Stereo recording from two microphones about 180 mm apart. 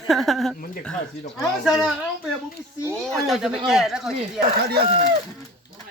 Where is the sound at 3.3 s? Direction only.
5° right (ahead or behind).